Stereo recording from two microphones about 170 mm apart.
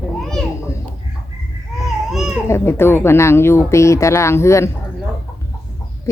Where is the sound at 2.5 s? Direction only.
15° left (ahead or behind).